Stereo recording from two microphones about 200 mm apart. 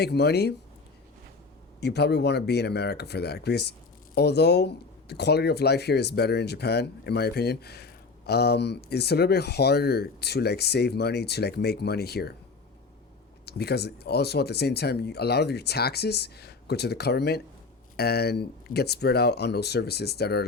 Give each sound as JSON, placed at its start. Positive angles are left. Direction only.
{"t": 0.0, "sound": "speech", "side_deg": 55}
{"t": 1.8, "sound": "speech", "side_deg": 55}
{"t": 13.4, "sound": "speech", "side_deg": 55}